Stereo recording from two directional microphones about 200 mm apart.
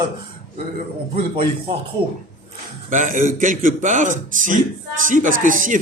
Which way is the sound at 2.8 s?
40° right (ahead or behind).